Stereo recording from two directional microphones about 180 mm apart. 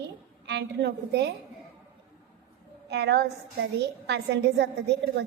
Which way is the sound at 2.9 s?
65° right (ahead or behind).